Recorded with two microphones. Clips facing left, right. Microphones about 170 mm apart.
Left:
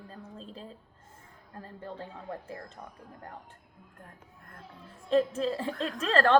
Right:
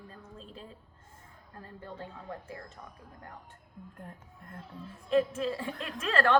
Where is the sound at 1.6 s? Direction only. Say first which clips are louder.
Left 2 dB; 35° left (ahead or behind).